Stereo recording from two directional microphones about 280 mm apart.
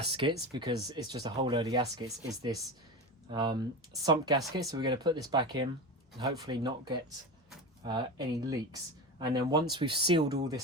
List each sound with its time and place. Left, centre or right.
0.1 s speech: centre